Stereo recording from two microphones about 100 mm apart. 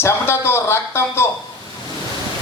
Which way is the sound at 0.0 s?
25° left (ahead or behind).